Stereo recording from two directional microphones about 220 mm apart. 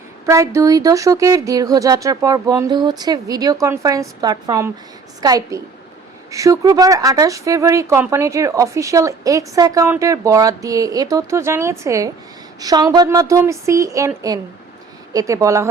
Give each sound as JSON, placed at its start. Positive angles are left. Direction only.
{"t": 0.3, "sound": "speech", "side_deg": -15}